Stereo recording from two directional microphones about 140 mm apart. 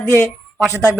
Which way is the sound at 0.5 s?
5° right (ahead or behind).